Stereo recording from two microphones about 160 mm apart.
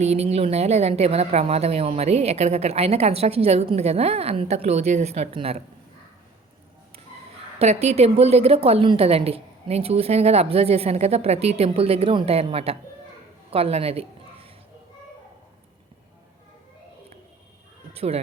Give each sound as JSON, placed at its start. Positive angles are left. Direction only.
{"t": 0.0, "sound": "a woman's voice", "side_deg": -40}
{"t": 7.6, "sound": "a woman's voice", "side_deg": -40}
{"t": 17.9, "sound": "speech", "side_deg": -40}